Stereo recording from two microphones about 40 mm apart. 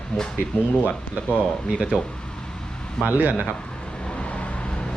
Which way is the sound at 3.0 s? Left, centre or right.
Right.